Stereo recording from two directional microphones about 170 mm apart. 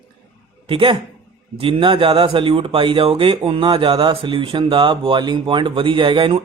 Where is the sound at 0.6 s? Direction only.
30° right (ahead or behind).